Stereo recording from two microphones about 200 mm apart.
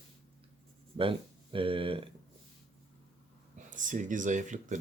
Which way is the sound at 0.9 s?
25° right (ahead or behind).